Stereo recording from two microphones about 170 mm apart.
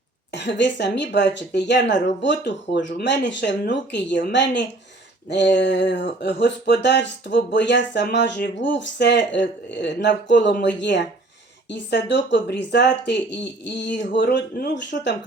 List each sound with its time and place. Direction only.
0.3 s speech: 90° left